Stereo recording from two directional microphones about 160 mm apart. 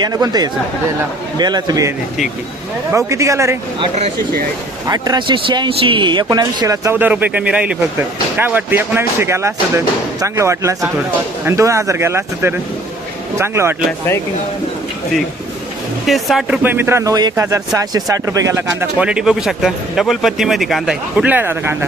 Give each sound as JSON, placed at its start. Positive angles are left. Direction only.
{"t": 0.0, "sound": "speech", "side_deg": -25}
{"t": 2.9, "sound": "speech", "side_deg": -20}
{"t": 3.8, "sound": "speech", "side_deg": -45}
{"t": 4.9, "sound": "speech", "side_deg": -25}
{"t": 16.0, "sound": "speech", "side_deg": 0}
{"t": 16.6, "sound": "speech", "side_deg": -15}